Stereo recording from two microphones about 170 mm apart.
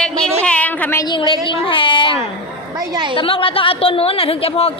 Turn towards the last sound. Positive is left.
turn(degrees=35)  # may be behind; listen again after turning